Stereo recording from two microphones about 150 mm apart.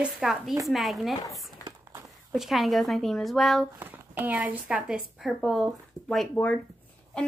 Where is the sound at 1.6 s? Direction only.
25° left (ahead or behind).